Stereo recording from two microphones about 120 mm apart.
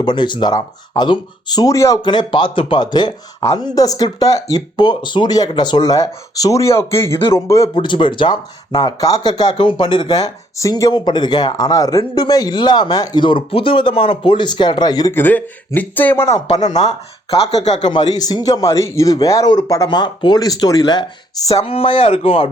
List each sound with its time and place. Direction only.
0.0 s speech: 40° left (ahead or behind)
2.0 s speech: 40° left (ahead or behind)
7.8 s speech: 40° left (ahead or behind)
10.9 s speech: 40° left (ahead or behind)
15.1 s speech: 15° left (ahead or behind)
16.6 s speech: 75° left (ahead or behind)
17.3 s speech: 65° left (ahead or behind)
17.8 s speech: 35° left (ahead or behind)
21.6 s speech: 50° left (ahead or behind)